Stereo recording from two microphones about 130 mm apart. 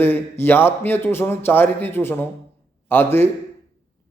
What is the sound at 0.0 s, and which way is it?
A man's voice, 15° left (ahead or behind).